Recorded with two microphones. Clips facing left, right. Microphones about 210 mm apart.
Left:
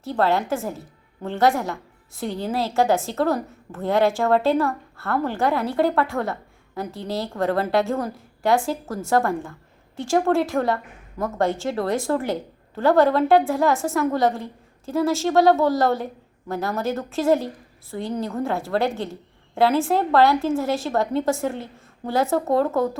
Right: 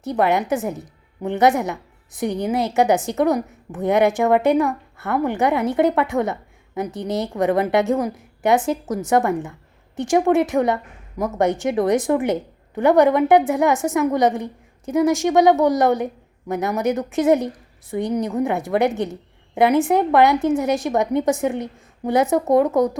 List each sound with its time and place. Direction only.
0.0 s a woman's voice: 20° right (ahead or behind)